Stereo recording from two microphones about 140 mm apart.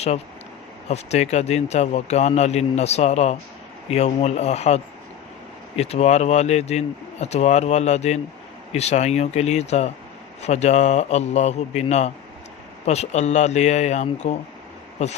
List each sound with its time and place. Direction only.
0.9 s speech: 50° left (ahead or behind)